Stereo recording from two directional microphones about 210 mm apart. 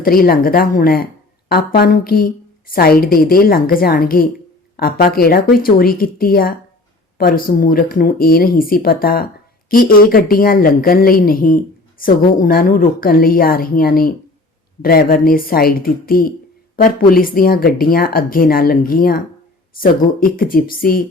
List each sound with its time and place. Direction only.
0.0 s speech: 45° left (ahead or behind)